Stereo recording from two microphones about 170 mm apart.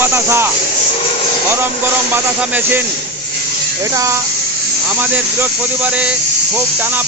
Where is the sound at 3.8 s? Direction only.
20° right (ahead or behind).